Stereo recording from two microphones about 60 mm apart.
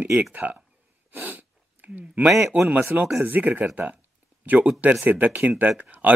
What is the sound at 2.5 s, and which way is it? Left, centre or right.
Speech, right.